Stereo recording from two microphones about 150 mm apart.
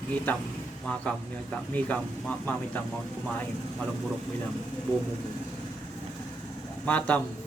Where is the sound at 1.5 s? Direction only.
10° left (ahead or behind).